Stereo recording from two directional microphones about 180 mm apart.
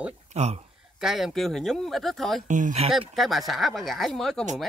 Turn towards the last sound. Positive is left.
turn(degrees=0)  # may be behind; listen again after turning